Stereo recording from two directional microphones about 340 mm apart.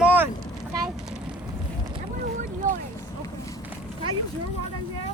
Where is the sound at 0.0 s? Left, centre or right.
Centre.